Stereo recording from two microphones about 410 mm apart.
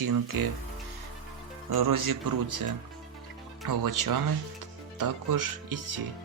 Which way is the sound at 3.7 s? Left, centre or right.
Right.